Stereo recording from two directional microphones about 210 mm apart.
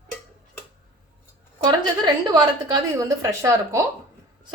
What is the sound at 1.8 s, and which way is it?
A woman's voice, 20° right (ahead or behind).